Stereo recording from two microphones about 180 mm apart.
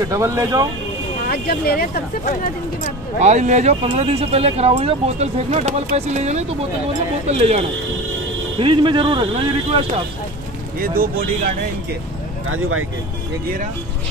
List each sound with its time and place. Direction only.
0.1 s speech: 15° right (ahead or behind)
1.2 s speech: 55° left (ahead or behind)
3.2 s speech: 40° right (ahead or behind)
8.5 s a man's voice: 25° right (ahead or behind)
10.8 s speech: 55° right (ahead or behind)